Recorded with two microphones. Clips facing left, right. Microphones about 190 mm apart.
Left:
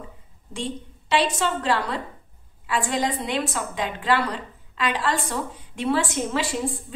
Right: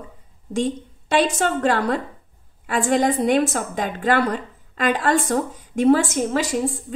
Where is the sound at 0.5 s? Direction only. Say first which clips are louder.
Right 8 dB; 45° right (ahead or behind).